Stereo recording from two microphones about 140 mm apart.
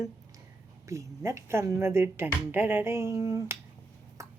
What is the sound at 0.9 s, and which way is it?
Speech, 20° right (ahead or behind).